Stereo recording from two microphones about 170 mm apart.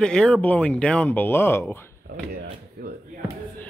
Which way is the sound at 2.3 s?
65° right (ahead or behind).